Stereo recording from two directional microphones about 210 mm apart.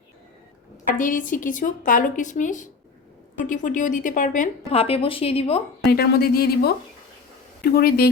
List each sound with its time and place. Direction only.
0.9 s a woman's voice: 40° left (ahead or behind)
5.9 s a woman's voice: 50° left (ahead or behind)